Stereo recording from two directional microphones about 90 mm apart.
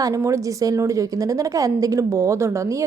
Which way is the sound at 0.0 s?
35° right (ahead or behind).